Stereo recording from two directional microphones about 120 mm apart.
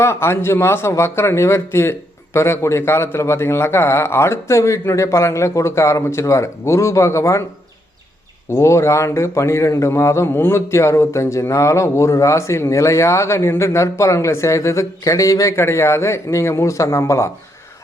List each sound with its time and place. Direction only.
0.0 s a man's voice: 20° left (ahead or behind)
8.5 s a man's voice: 25° left (ahead or behind)